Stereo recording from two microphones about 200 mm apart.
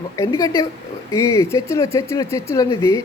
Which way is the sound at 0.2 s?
15° left (ahead or behind).